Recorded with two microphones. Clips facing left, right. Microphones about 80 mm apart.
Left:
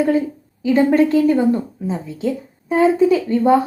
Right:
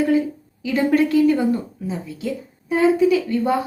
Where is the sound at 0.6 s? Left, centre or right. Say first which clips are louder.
Left 4 dB; left.